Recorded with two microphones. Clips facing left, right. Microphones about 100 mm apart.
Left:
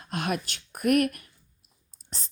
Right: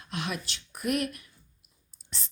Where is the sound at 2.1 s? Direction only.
40° left (ahead or behind).